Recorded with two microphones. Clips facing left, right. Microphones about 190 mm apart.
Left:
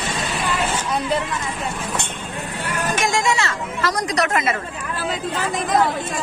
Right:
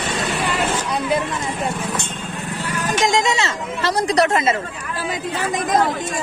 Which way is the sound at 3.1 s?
20° right (ahead or behind).